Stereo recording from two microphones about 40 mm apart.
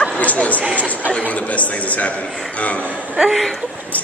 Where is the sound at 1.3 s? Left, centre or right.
Left.